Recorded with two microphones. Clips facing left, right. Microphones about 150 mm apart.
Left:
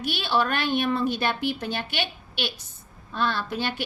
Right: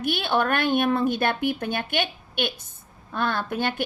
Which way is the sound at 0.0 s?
55° right (ahead or behind).